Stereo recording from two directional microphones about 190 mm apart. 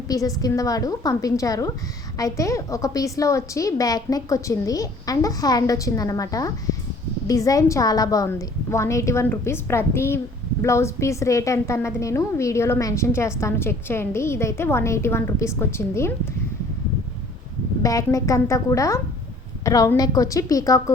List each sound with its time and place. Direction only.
0.1 s a woman's voice: 20° left (ahead or behind)
17.8 s a woman's voice: 15° left (ahead or behind)